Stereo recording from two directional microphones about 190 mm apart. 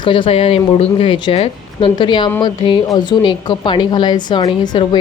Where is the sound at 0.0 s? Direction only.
25° left (ahead or behind).